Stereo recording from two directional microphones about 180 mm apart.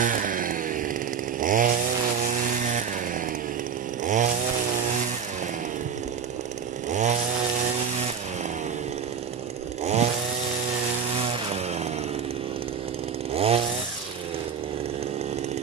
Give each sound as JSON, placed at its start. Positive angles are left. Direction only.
{"t": 0.0, "sound": "chainsaw", "side_deg": -50}
{"t": 4.0, "sound": "chainsaw", "side_deg": -45}
{"t": 6.9, "sound": "chainsaw", "side_deg": -40}
{"t": 11.2, "sound": "chainsaw", "side_deg": -35}
{"t": 13.3, "sound": "chainsaw", "side_deg": -35}